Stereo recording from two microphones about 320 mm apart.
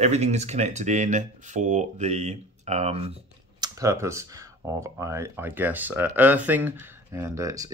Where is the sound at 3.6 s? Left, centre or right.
Centre.